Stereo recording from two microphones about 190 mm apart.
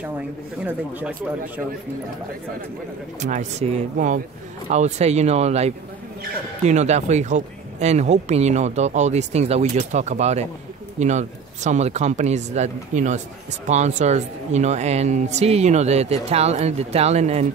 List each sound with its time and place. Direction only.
0.7 s speech: 10° right (ahead or behind)
3.2 s speech: 40° right (ahead or behind)